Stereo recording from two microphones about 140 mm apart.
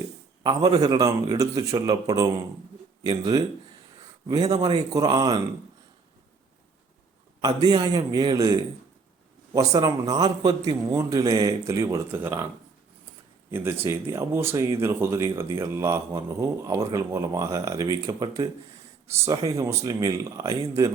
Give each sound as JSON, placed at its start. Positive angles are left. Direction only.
{"t": 0.4, "sound": "speech", "side_deg": -30}
{"t": 7.4, "sound": "a man's voice", "side_deg": -30}
{"t": 13.5, "sound": "speech", "side_deg": -15}
{"t": 19.5, "sound": "speech", "side_deg": -25}